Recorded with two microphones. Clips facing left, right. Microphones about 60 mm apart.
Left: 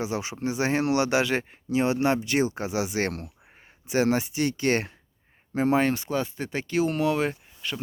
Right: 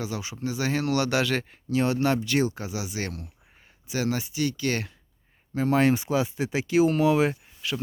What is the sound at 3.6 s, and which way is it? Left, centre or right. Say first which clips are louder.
Speech: left 5 dB; left.